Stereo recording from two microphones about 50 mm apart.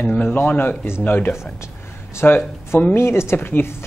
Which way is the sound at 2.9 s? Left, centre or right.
Left.